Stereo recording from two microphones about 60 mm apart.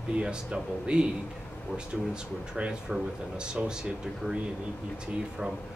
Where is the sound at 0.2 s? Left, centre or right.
Centre.